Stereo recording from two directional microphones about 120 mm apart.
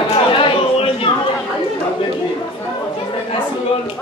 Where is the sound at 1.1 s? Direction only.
45° left (ahead or behind).